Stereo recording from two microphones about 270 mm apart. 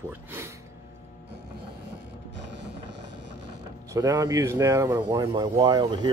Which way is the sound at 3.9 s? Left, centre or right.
Centre.